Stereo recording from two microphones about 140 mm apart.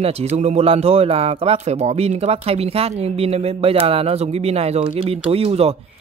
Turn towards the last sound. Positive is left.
turn(degrees=-45)  # may be behind; listen again after turning